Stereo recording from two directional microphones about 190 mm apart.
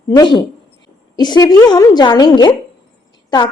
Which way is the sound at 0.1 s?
25° left (ahead or behind).